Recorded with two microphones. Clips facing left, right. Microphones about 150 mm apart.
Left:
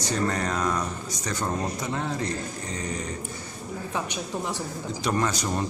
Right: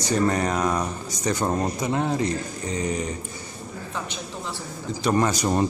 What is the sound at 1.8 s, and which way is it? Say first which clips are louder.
Speech: right 5 dB; 15° right (ahead or behind).